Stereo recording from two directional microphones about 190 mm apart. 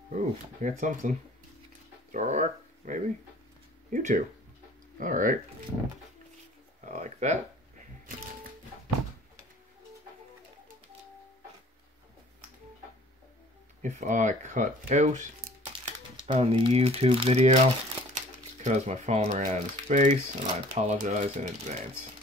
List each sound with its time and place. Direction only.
0.1 s speech: 40° right (ahead or behind)
2.1 s speech: 40° right (ahead or behind)
6.8 s speech: 40° right (ahead or behind)
13.8 s speech: 40° right (ahead or behind)
16.3 s speech: 30° right (ahead or behind)